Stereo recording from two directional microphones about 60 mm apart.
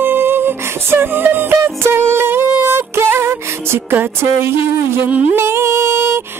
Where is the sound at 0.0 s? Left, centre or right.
Right.